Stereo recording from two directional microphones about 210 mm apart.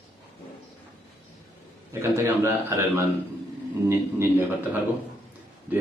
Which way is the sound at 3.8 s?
10° right (ahead or behind).